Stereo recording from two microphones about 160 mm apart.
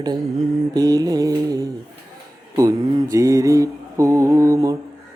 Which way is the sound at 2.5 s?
20° right (ahead or behind).